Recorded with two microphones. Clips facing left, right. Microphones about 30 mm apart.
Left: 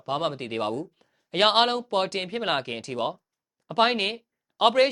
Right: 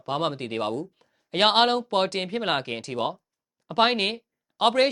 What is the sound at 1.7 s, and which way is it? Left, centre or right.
Speech, centre.